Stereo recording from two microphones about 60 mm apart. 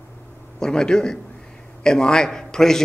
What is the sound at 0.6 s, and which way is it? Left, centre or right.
A man's voice, centre.